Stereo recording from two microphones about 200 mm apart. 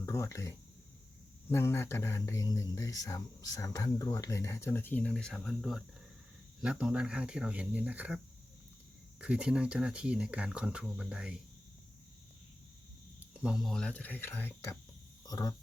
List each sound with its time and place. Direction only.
0.0 s speech: 15° left (ahead or behind); by 8.2 s 5° right (ahead or behind)
9.2 s speech: 5° right (ahead or behind)
13.1 s speech: 5° right (ahead or behind); by 15.5 s 20° left (ahead or behind)